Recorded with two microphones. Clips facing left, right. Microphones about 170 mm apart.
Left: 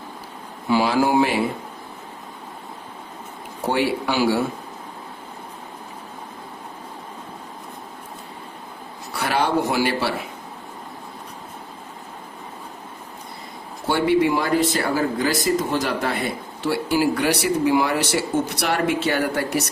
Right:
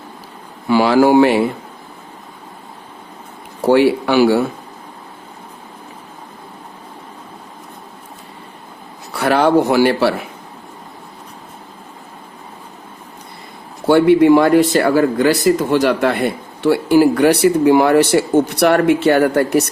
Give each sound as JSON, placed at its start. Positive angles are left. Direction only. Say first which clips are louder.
{"t": 0.7, "sound": "speech", "louder": "right 7 dB", "side_deg": -70}
{"t": 3.7, "sound": "speech", "louder": "right 9 dB", "side_deg": -65}
{"t": 9.2, "sound": "speech", "louder": "right 8 dB", "side_deg": -55}
{"t": 13.8, "sound": "speech", "louder": "right 9 dB", "side_deg": -60}